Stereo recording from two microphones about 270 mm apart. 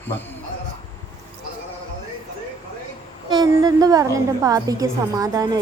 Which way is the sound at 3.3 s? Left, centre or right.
Centre.